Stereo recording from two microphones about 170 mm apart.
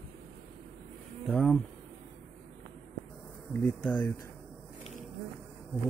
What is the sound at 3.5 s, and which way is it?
Speech, 5° left (ahead or behind).